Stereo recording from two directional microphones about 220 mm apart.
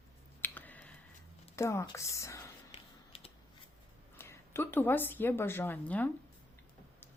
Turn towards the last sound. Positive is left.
turn(degrees=5)  # may be behind; listen again after turning